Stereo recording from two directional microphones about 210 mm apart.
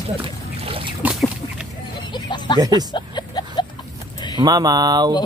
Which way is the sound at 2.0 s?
20° left (ahead or behind).